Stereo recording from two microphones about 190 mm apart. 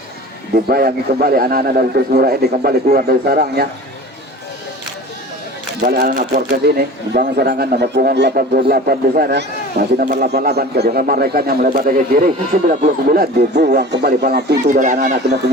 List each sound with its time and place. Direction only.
0.5 s speech: 50° right (ahead or behind)
5.8 s speech: 50° right (ahead or behind)
14.6 s speech: 40° right (ahead or behind)